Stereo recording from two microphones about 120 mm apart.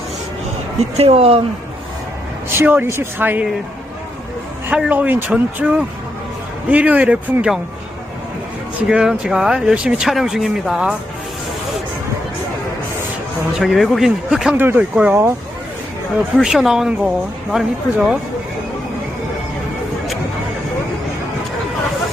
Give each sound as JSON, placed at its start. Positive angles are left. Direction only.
{"t": 0.8, "sound": "speech", "side_deg": -60}
{"t": 2.5, "sound": "speech", "side_deg": -15}
{"t": 4.7, "sound": "speech", "side_deg": -10}
{"t": 8.9, "sound": "speech", "side_deg": -5}
{"t": 13.6, "sound": "speech", "side_deg": 0}
{"t": 14.5, "sound": "speech", "side_deg": -15}
{"t": 16.4, "sound": "speech", "side_deg": -5}